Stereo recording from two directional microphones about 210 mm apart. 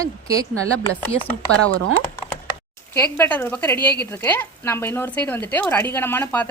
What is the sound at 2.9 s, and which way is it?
A woman's voice, 10° left (ahead or behind).